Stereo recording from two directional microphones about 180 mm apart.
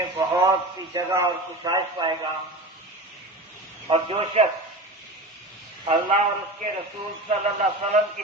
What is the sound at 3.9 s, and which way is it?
Speech, 35° right (ahead or behind).